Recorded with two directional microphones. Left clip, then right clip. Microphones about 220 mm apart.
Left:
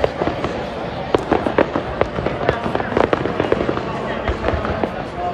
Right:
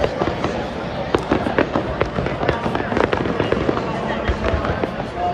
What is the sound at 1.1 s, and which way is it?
Fireworks, 40° left (ahead or behind).